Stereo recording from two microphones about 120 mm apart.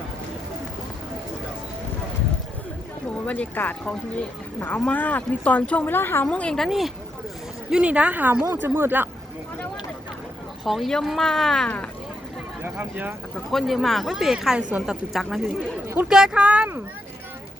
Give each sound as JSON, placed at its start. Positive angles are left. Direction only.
{"t": 3.2, "sound": "speech", "side_deg": 10}
{"t": 6.2, "sound": "a woman's voice", "side_deg": 10}
{"t": 10.6, "sound": "speech", "side_deg": 0}
{"t": 12.6, "sound": "speech", "side_deg": -15}
{"t": 13.5, "sound": "a woman's voice", "side_deg": 0}